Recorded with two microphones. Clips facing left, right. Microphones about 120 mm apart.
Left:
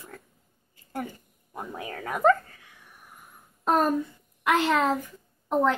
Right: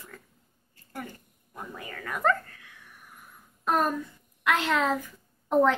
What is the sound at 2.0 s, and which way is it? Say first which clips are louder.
Dog: left 5 dB; 20° left (ahead or behind).